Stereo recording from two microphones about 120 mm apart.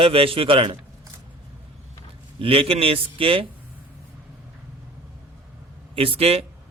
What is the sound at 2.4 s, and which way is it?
A man's voice, 50° right (ahead or behind).